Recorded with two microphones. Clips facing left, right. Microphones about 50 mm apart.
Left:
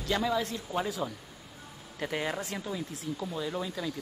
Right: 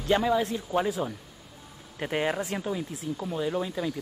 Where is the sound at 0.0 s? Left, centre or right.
Right.